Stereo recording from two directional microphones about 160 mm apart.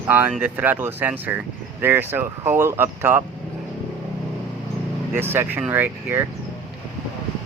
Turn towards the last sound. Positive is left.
turn(degrees=-15)  # may be behind; listen again after turning